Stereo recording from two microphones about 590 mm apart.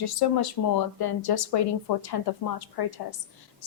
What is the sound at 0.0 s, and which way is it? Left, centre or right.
A woman's voice, left.